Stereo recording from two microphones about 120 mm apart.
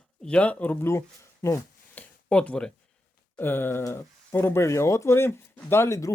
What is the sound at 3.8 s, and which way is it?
Speech, 20° left (ahead or behind).